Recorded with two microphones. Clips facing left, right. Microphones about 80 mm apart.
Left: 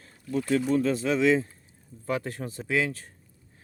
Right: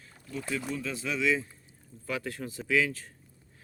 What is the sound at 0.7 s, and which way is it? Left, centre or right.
Speech, left.